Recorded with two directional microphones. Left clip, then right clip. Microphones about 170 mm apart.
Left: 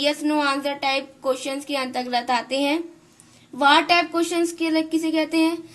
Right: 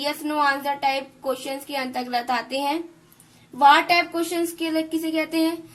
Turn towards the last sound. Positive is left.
turn(degrees=25)  # may be behind; listen again after turning